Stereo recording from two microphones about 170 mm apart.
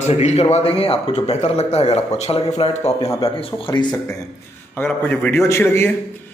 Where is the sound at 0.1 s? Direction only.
40° left (ahead or behind).